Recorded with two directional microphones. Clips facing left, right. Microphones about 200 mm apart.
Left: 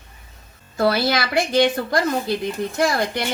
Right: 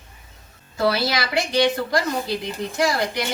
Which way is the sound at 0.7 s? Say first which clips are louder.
Left 2 dB; 50° left (ahead or behind).